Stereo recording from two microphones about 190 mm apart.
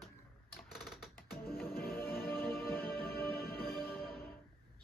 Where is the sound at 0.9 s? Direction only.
Centre (ahead or behind).